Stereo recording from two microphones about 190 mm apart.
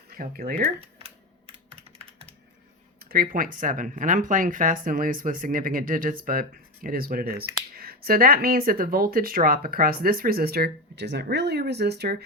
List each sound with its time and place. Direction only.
0.2 s speech: 50° right (ahead or behind)
0.6 s speech: 30° right (ahead or behind)
3.1 s speech: 50° right (ahead or behind)